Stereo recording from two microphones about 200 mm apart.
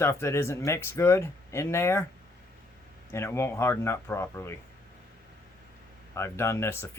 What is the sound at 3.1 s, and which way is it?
Speech, 15° left (ahead or behind).